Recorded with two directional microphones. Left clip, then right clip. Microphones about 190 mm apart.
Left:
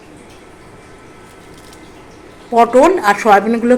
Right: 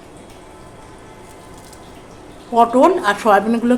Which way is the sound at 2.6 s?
10° left (ahead or behind).